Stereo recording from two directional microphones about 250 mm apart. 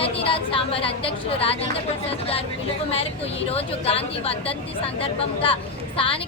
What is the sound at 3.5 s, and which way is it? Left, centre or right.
A woman's voice, left.